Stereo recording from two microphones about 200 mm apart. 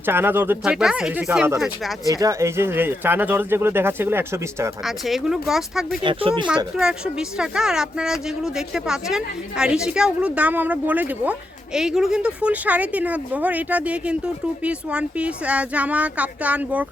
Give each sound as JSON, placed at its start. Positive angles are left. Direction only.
{"t": 0.0, "sound": "speech", "side_deg": -10}
{"t": 4.9, "sound": "a woman's voice", "side_deg": 0}
{"t": 6.0, "sound": "speech", "side_deg": -25}
{"t": 6.7, "sound": "a woman's voice", "side_deg": -5}